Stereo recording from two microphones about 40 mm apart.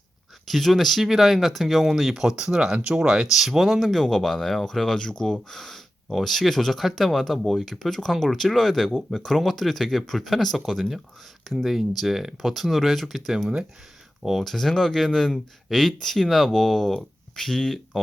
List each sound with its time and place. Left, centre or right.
0.4 s speech: centre
2.7 s speech: right
3.3 s speech: centre
5.5 s speech: centre
11.5 s speech: centre
14.5 s speech: centre